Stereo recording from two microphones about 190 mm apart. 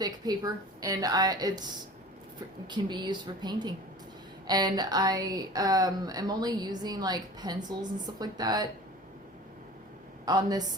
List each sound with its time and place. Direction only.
0.0 s a woman's voice: 20° right (ahead or behind)
2.6 s speech: 25° right (ahead or behind)
10.2 s speech: 20° right (ahead or behind)